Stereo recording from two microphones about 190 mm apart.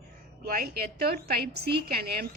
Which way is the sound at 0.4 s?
50° right (ahead or behind).